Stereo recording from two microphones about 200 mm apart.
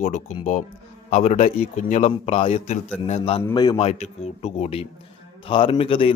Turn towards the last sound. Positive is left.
turn(degrees=25)  # may be behind; listen again after turning